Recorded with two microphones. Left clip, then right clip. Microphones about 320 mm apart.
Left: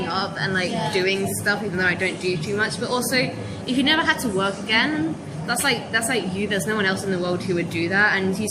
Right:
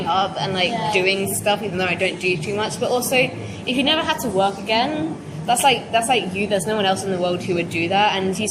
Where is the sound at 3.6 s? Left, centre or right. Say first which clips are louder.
Even; centre.